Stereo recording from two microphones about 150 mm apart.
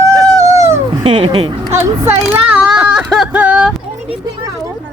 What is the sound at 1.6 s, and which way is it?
Speech, 20° right (ahead or behind).